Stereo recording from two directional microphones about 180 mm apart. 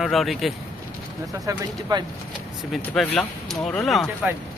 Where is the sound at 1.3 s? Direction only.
20° right (ahead or behind).